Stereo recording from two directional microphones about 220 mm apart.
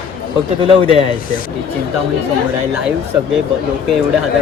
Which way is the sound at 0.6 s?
25° right (ahead or behind).